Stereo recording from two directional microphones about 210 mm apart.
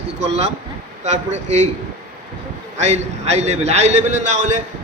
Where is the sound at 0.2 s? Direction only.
30° right (ahead or behind).